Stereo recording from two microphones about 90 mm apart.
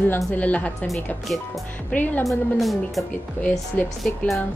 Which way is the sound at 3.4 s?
20° left (ahead or behind).